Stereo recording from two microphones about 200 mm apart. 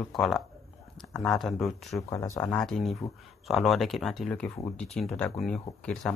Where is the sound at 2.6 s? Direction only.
Centre (ahead or behind).